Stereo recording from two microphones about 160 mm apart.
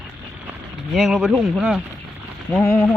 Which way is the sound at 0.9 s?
5° right (ahead or behind).